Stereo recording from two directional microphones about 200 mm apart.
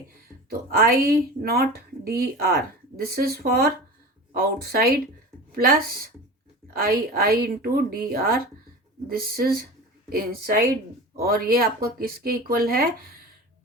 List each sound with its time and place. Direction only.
0.7 s a woman's voice: 50° right (ahead or behind)